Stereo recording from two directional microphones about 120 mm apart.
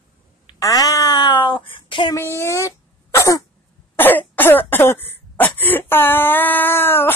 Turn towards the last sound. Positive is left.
turn(degrees=20)  # may be behind; listen again after turning